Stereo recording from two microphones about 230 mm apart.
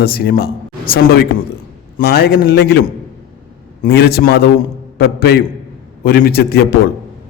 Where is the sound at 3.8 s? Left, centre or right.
Left.